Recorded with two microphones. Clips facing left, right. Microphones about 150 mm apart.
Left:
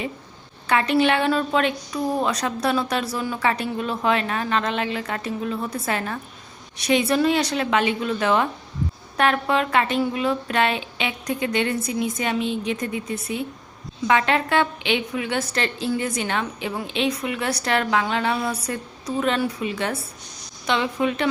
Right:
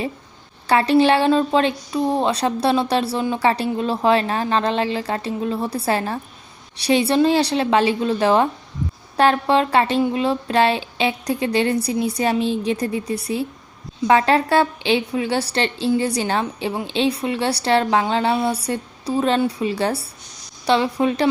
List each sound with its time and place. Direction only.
0.7 s a woman's voice: 35° right (ahead or behind)